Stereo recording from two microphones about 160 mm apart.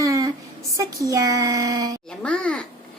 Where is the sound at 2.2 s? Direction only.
5° left (ahead or behind).